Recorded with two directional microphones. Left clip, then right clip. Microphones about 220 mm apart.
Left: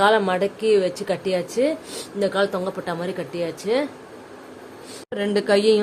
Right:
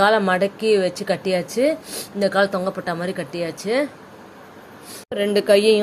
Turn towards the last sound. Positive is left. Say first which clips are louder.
# right 3 dB
turn(degrees=0)  # may be behind; listen again after turning